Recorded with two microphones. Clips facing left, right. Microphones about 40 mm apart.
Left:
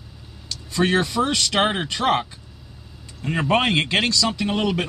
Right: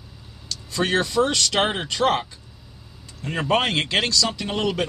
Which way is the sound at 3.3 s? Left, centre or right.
Centre.